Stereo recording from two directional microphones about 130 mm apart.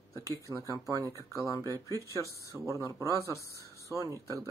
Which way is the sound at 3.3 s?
25° left (ahead or behind).